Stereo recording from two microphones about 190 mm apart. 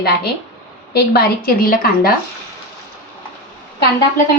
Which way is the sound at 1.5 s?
50° left (ahead or behind).